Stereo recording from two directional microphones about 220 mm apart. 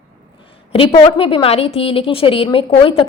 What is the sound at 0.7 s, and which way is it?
A woman's voice, 25° left (ahead or behind).